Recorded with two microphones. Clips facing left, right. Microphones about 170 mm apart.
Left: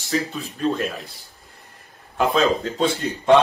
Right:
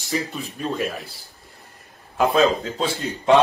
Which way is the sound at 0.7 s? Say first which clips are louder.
Left 3 dB; centre (ahead or behind).